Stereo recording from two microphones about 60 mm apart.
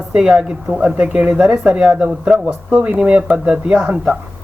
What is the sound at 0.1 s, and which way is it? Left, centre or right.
Speech, centre.